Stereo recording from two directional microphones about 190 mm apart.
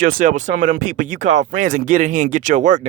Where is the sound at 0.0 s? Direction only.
45° right (ahead or behind).